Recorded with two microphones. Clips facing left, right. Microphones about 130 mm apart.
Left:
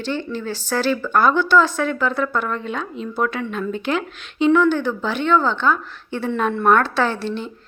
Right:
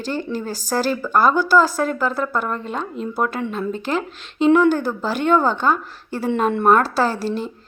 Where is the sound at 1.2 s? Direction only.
5° right (ahead or behind).